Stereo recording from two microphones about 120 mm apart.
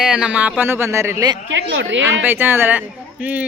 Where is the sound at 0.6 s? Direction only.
20° right (ahead or behind).